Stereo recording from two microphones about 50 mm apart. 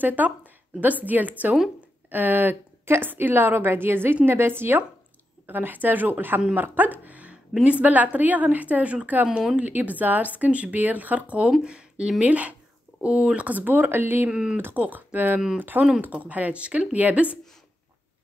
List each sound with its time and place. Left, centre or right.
0.0 s a woman's voice: right
6.5 s a sound: right
7.6 s speech: right
14.3 s speech: centre
14.8 s speech: right